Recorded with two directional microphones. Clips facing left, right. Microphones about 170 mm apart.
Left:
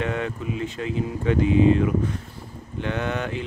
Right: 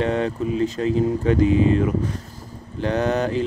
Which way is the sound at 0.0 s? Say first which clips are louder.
Right 5 dB; 35° right (ahead or behind).